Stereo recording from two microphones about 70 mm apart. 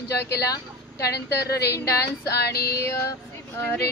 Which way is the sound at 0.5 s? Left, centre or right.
Left.